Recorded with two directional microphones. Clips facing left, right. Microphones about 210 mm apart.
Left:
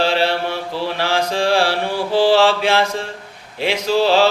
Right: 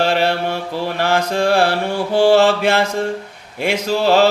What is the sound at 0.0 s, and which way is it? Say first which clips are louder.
Mantra: right 1 dB; 50° right (ahead or behind).